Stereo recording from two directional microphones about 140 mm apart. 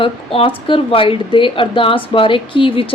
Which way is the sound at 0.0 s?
40° left (ahead or behind).